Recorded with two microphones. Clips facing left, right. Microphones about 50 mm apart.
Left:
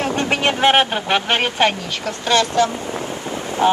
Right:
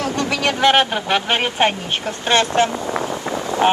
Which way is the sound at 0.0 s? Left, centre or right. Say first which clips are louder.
Left 1 dB; left.